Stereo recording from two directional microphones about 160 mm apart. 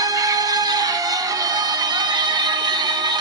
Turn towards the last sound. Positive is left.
turn(degrees=-25)  # may be behind; listen again after turning